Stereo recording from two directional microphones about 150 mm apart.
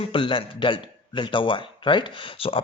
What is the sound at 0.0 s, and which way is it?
A man's voice, 35° left (ahead or behind).